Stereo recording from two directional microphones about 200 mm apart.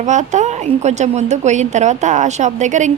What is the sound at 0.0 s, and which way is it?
A woman's voice, 35° right (ahead or behind).